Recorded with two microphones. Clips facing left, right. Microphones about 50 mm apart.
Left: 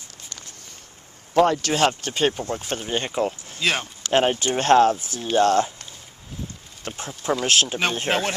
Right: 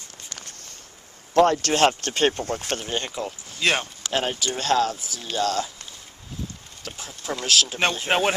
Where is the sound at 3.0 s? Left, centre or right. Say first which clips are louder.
Left 6 dB; left.